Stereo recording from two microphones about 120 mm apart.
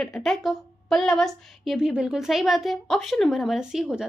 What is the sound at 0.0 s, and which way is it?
A woman's voice, centre (ahead or behind).